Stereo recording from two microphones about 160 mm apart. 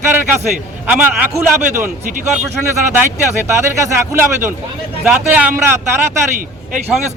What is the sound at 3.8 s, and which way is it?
A man's voice, 15° right (ahead or behind).